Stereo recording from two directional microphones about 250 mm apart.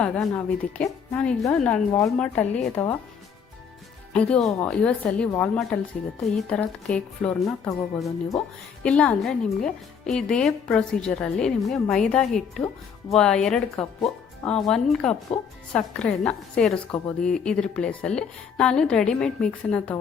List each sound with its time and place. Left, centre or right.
0.0 s a woman's voice: centre
4.1 s speech: centre
15.3 s speech: left
15.7 s speech: centre